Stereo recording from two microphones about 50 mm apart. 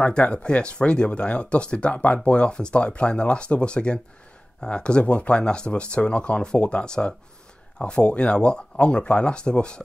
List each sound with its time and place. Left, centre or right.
0.0 s speech: left